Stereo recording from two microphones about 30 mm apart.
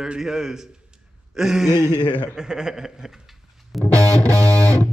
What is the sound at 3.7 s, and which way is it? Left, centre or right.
Music, centre.